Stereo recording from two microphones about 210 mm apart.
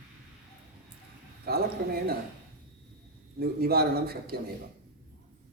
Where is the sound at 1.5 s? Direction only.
50° right (ahead or behind).